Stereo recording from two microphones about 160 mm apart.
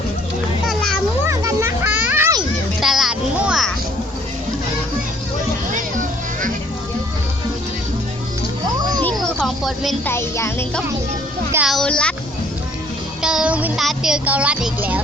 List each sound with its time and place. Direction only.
0.7 s children playing: 5° left (ahead or behind)
1.3 s music: 20° right (ahead or behind)
2.8 s a sound: centre (ahead or behind)
8.6 s music: 25° right (ahead or behind)
9.4 s music: centre (ahead or behind)
10.1 s speech: 15° left (ahead or behind)
11.5 s speech: 5° right (ahead or behind)
13.2 s speech: 5° right (ahead or behind)